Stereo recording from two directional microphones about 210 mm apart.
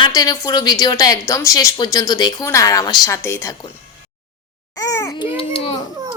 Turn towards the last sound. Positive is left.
turn(degrees=25)  # may be behind; listen again after turning